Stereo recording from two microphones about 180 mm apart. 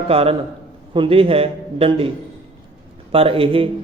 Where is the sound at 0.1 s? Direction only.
30° right (ahead or behind).